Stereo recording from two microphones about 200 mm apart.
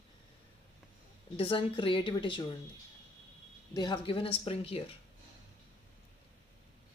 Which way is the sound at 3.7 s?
20° left (ahead or behind).